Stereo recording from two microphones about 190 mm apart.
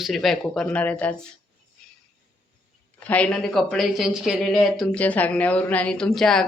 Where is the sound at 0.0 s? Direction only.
Centre (ahead or behind).